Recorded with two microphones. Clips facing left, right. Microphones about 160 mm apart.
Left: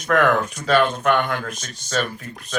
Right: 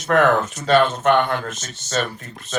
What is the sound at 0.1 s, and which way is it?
Speech, 35° right (ahead or behind).